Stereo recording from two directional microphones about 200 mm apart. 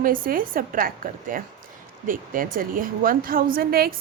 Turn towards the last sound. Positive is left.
turn(degrees=-50)  # may be behind; listen again after turning